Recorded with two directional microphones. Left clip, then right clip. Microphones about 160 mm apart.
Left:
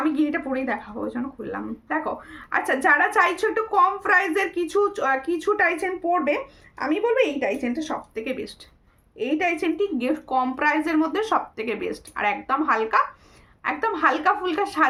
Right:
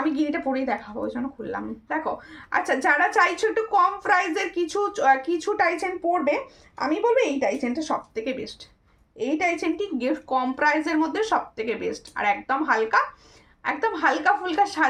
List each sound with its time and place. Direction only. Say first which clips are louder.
0.0 s speech: left 1 dB; 15° left (ahead or behind)